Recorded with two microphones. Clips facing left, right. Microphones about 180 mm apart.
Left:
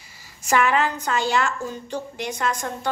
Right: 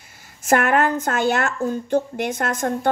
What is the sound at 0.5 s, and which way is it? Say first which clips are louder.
A woman's voice: right 3 dB; 55° right (ahead or behind).